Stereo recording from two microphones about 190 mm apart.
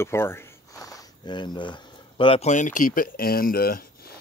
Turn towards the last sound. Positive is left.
turn(degrees=50)  # may be behind; listen again after turning